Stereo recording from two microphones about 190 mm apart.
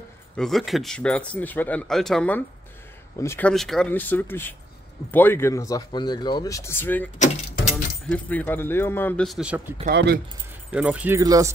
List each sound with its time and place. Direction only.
0.4 s speech: centre (ahead or behind)
8.1 s speech: 10° left (ahead or behind)
9.8 s speech: 55° right (ahead or behind)
10.7 s speech: 5° right (ahead or behind)